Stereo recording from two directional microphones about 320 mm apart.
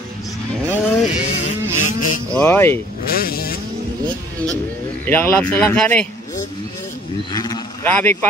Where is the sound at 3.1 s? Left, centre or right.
Left.